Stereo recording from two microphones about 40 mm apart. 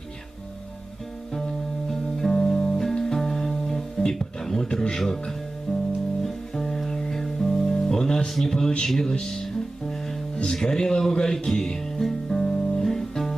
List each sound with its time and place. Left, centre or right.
1.3 s music: centre
10.3 s speech: centre
11.1 s music: centre